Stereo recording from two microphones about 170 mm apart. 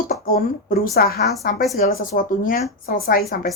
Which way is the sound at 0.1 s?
55° left (ahead or behind).